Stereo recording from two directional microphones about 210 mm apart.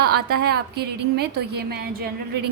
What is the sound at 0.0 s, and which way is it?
A woman's voice, 50° right (ahead or behind).